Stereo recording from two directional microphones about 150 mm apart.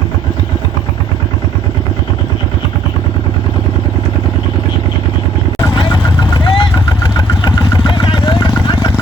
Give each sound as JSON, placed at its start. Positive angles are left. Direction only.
{"t": 5.7, "sound": "vehicle", "side_deg": 30}